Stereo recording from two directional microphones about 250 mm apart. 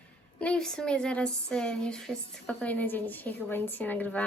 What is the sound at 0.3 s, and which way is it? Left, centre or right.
A woman's voice, centre.